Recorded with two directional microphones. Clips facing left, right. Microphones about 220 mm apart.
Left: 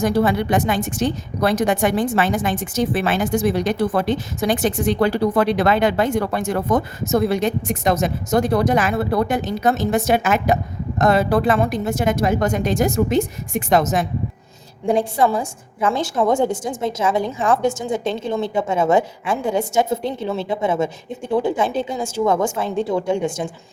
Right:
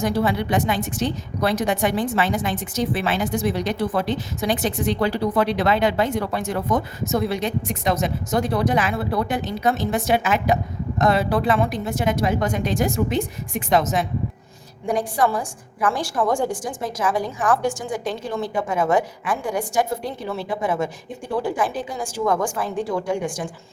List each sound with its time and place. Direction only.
0.0 s a woman's voice: 45° left (ahead or behind)
14.8 s a woman's voice: 25° left (ahead or behind)